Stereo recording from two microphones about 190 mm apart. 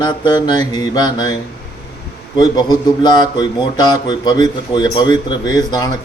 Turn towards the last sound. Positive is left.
turn(degrees=20)  # may be behind; listen again after turning